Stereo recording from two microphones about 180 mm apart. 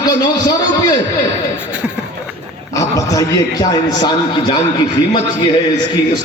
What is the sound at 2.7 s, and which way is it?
A man's voice, 20° left (ahead or behind).